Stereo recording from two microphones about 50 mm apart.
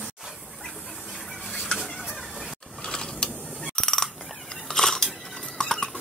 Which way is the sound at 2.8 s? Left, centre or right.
Centre.